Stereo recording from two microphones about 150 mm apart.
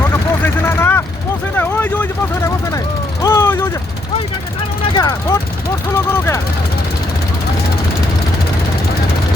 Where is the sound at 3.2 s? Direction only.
15° left (ahead or behind).